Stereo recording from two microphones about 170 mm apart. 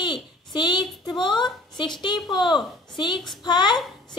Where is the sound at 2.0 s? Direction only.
25° left (ahead or behind).